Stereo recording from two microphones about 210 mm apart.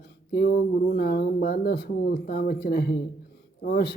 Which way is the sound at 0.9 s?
50° left (ahead or behind).